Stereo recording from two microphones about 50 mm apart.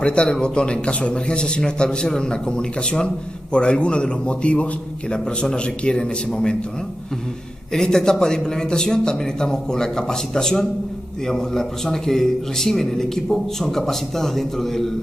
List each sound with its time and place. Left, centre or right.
0.0 s a man's voice: left
7.7 s a man's voice: centre